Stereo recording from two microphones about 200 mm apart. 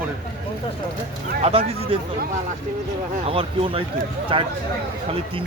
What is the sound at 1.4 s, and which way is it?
Speech, 30° right (ahead or behind).